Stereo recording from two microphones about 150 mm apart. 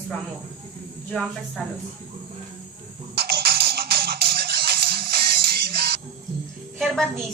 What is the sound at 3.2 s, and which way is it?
Music, 90° right.